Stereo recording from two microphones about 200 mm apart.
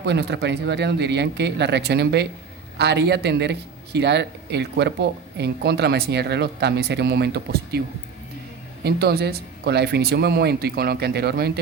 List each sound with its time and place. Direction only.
0.0 s speech: 60° right (ahead or behind)
8.8 s speech: 50° right (ahead or behind)